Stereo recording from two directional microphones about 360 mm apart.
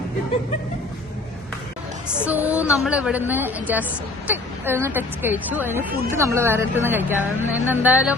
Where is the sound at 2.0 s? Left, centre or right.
Centre.